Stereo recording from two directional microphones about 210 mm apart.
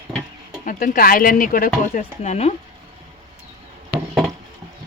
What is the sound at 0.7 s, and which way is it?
Speech, 40° left (ahead or behind).